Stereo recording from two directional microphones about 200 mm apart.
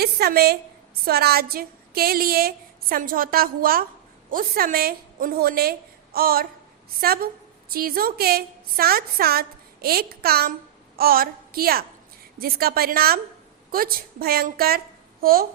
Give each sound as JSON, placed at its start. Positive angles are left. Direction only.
{"t": 0.0, "sound": "a woman's voice", "side_deg": -50}